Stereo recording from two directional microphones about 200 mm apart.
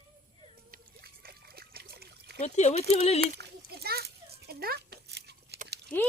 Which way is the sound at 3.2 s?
55° right (ahead or behind).